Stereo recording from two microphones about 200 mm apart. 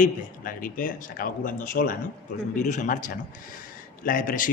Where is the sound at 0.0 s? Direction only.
45° left (ahead or behind).